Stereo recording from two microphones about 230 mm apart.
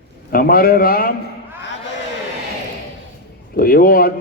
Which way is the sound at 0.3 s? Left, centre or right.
Left.